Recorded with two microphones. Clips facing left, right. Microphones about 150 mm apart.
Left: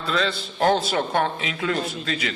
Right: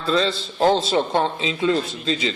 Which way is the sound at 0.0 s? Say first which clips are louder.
Right 4 dB; 30° right (ahead or behind).